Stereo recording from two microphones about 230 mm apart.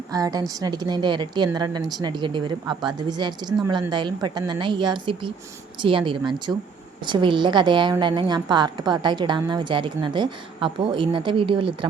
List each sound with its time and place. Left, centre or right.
0.1 s a woman's voice: centre